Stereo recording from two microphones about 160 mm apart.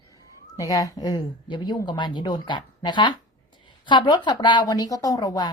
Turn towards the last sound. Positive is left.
turn(degrees=25)  # may be behind; listen again after turning